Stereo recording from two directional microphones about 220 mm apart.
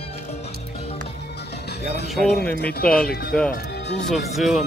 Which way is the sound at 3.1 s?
45° left (ahead or behind).